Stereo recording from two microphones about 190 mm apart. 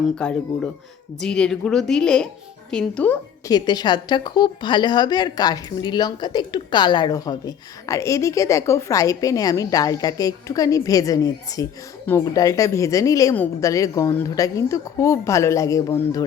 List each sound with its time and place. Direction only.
0.2 s speech: 5° left (ahead or behind)
3.5 s a woman's voice: 20° left (ahead or behind)